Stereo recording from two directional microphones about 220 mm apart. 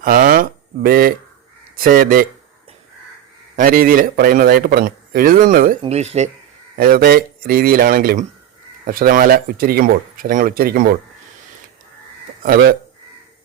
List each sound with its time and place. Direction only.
0.0 s a man's voice: 40° right (ahead or behind)
3.5 s a man's voice: 40° right (ahead or behind)
5.8 s a man's voice: 30° right (ahead or behind)
6.7 s a man's voice: 45° right (ahead or behind)
12.4 s speech: 45° right (ahead or behind)